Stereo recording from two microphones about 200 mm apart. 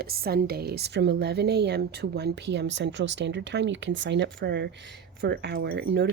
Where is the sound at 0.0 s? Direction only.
50° right (ahead or behind).